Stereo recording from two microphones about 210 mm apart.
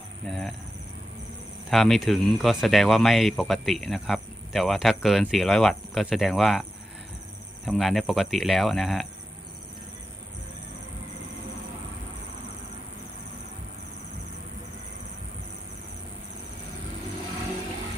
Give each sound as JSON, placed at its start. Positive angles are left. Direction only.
{"t": 0.3, "sound": "speech", "side_deg": 0}
{"t": 1.7, "sound": "speech", "side_deg": 0}